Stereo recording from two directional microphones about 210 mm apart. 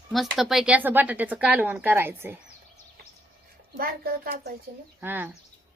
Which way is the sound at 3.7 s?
45° right (ahead or behind).